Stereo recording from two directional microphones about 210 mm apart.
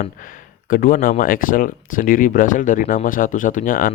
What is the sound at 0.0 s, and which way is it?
Speech, 40° left (ahead or behind).